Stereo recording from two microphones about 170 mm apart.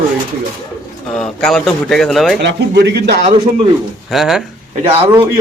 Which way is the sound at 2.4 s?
90° right.